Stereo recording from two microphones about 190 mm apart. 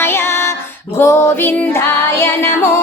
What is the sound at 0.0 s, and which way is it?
Music, 10° left (ahead or behind).